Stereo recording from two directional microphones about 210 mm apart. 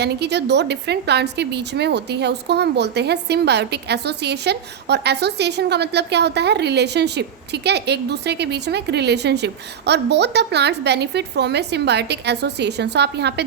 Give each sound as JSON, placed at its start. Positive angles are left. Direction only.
{"t": 0.0, "sound": "a woman's voice", "side_deg": -55}